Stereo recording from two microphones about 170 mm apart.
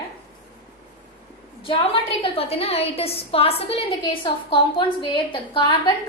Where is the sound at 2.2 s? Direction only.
35° left (ahead or behind).